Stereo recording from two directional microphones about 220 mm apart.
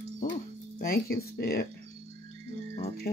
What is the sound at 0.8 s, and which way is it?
Speech, 45° left (ahead or behind).